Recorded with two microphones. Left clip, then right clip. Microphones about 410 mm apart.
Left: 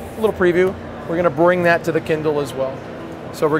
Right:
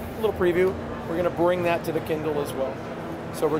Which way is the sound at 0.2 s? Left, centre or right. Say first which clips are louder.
Left 6 dB; left.